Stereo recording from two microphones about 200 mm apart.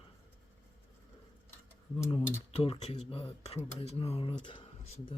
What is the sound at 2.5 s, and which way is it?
Speech, 30° left (ahead or behind).